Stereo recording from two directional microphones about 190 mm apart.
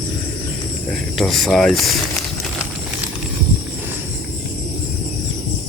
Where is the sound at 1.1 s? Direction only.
Centre (ahead or behind).